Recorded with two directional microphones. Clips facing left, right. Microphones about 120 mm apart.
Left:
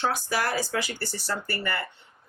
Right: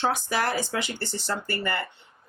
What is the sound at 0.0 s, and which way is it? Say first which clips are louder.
Speech: right 1 dB; 25° right (ahead or behind).